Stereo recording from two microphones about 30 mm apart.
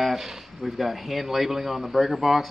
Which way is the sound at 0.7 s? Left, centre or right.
Centre.